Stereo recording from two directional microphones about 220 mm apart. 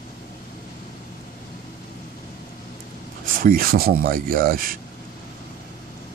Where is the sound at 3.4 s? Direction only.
40° right (ahead or behind).